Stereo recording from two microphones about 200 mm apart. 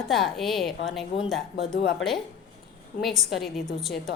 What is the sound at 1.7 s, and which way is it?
Speech, 50° left (ahead or behind).